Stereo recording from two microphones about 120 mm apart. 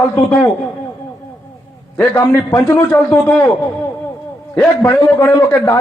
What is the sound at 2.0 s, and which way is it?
A man's voice, 25° left (ahead or behind).